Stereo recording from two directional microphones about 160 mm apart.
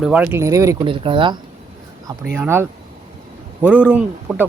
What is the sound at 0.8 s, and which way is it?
Speech, 35° right (ahead or behind).